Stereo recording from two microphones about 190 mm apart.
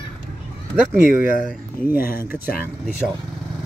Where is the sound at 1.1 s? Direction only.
45° left (ahead or behind).